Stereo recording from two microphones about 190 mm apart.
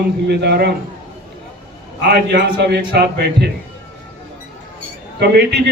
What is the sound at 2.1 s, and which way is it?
A man's voice, 60° right (ahead or behind).